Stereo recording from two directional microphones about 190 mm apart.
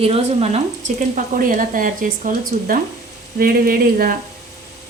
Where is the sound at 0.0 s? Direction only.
35° right (ahead or behind).